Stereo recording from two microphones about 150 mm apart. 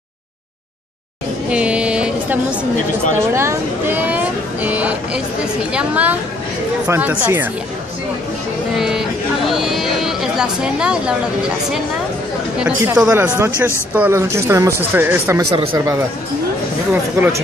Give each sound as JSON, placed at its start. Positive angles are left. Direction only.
{"t": 1.5, "sound": "music", "side_deg": -10}
{"t": 3.2, "sound": "speech", "side_deg": -15}
{"t": 8.7, "sound": "a sound", "side_deg": -5}
{"t": 9.5, "sound": "speech", "side_deg": 0}